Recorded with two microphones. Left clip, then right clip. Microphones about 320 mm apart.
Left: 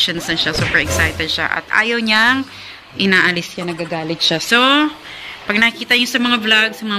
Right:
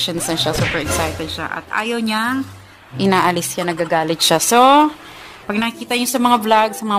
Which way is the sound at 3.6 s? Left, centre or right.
Right.